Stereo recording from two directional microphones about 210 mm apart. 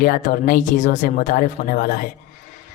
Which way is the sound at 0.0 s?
40° left (ahead or behind).